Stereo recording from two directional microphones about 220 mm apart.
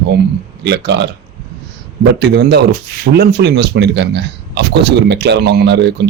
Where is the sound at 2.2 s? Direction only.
50° right (ahead or behind).